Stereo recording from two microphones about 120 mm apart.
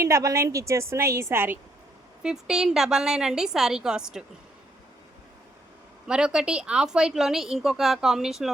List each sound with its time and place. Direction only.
0.0 s a woman's voice: 25° right (ahead or behind)
2.2 s a woman's voice: 5° right (ahead or behind)
6.1 s a woman's voice: 5° right (ahead or behind)